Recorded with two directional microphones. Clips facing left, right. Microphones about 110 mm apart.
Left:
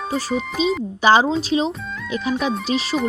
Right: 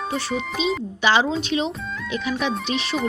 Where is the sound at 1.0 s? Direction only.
40° left (ahead or behind).